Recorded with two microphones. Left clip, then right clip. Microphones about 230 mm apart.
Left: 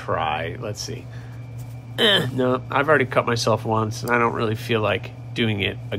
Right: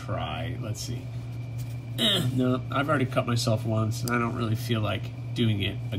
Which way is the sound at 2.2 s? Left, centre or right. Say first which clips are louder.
Left 6 dB; left.